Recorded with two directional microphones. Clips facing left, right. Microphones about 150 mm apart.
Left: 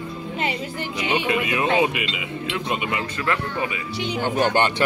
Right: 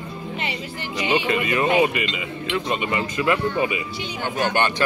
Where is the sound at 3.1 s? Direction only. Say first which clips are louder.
Right 4 dB; 10° right (ahead or behind).